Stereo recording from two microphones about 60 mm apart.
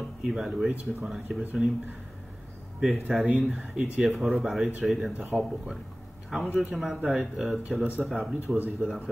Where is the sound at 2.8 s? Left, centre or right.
Centre.